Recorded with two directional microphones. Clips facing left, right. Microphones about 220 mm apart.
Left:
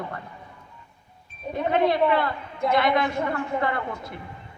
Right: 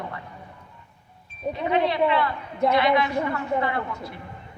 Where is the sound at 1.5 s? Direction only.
50° left (ahead or behind).